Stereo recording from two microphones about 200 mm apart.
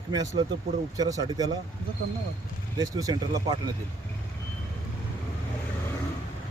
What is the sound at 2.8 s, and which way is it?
Speech, 20° right (ahead or behind).